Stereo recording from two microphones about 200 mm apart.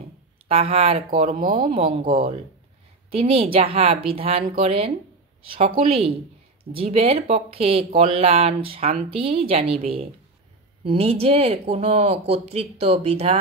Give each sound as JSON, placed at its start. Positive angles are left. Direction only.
{"t": 0.5, "sound": "speech", "side_deg": -30}
{"t": 3.1, "sound": "a woman's voice", "side_deg": -30}